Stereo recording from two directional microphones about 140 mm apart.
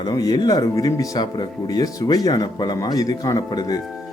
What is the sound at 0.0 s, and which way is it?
Speech, 30° left (ahead or behind).